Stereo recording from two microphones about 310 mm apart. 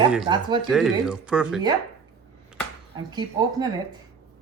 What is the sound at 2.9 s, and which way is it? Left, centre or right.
Speech, centre.